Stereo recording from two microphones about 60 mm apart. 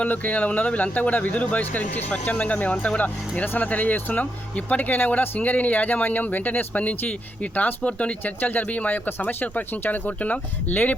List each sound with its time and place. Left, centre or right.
0.0 s speech: left